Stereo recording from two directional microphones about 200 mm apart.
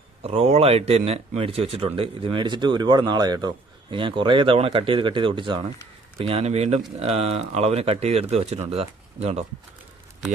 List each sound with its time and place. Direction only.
0.2 s speech: 30° right (ahead or behind)